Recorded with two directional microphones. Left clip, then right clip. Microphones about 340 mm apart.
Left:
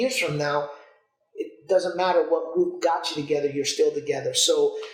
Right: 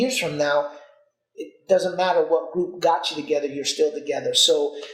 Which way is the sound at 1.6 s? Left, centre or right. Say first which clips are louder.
Right 2 dB; right.